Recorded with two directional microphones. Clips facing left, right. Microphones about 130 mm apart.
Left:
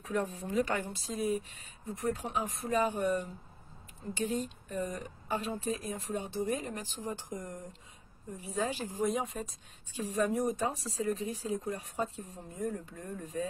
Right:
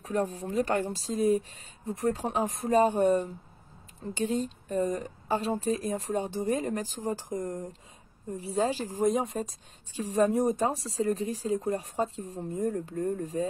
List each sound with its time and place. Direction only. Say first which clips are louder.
0.0 s speech: right 4 dB; 40° right (ahead or behind)
7.2 s speech: right 8 dB; 90° right
8.5 s speech: right 5 dB; 35° right (ahead or behind)